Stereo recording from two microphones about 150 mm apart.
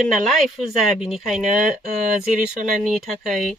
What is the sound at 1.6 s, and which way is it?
Speech, 55° right (ahead or behind).